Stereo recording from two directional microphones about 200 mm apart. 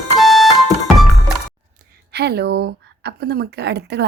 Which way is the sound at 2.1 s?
55° right (ahead or behind).